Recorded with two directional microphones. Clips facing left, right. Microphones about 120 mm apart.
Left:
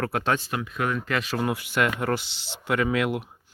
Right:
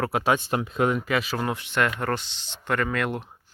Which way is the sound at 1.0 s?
5° right (ahead or behind).